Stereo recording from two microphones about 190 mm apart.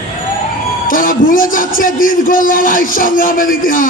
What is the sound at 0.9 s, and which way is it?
A man's voice, 45° left (ahead or behind).